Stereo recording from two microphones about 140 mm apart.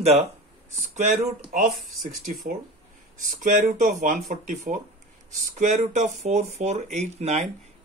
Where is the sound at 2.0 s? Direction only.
65° right (ahead or behind).